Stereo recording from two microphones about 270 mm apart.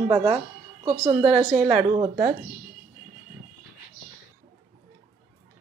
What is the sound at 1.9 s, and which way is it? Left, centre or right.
Speech, centre.